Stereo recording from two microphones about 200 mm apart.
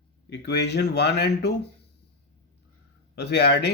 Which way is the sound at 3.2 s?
55° left (ahead or behind).